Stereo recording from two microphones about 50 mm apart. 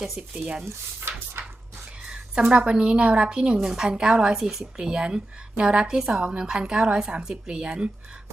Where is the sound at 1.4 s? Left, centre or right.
Right.